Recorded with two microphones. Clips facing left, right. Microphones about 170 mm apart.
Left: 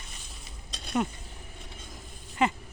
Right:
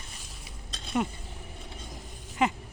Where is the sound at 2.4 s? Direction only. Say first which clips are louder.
Even; 10° right (ahead or behind).